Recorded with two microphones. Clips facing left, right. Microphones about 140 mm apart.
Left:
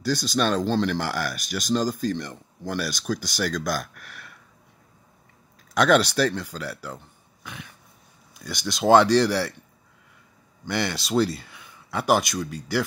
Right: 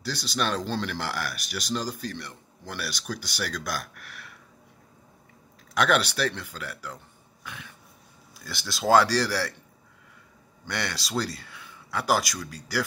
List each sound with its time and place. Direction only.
0.0 s speech: 45° left (ahead or behind)
4.0 s a sound: 45° left (ahead or behind)
5.8 s speech: 40° left (ahead or behind)
7.4 s a sound: 15° left (ahead or behind)
8.5 s speech: 15° left (ahead or behind)
10.6 s speech: 20° left (ahead or behind)